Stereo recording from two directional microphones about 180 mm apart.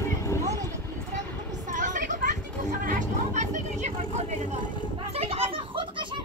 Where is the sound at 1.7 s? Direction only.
45° right (ahead or behind).